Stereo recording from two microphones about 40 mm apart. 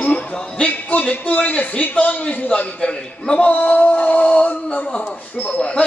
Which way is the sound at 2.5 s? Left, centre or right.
Left.